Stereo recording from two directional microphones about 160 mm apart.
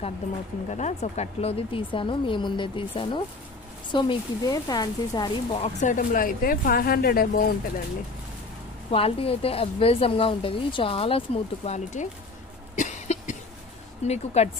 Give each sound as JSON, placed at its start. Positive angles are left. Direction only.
{"t": 0.7, "sound": "speech", "side_deg": 45}
{"t": 5.5, "sound": "speech", "side_deg": 45}
{"t": 8.9, "sound": "speech", "side_deg": 35}
{"t": 12.7, "sound": "cough", "side_deg": 45}
{"t": 14.0, "sound": "speech", "side_deg": 45}